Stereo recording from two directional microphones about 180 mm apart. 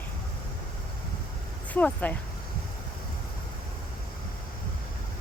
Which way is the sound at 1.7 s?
10° left (ahead or behind).